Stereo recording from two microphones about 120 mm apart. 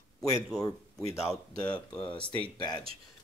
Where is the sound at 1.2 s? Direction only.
35° left (ahead or behind).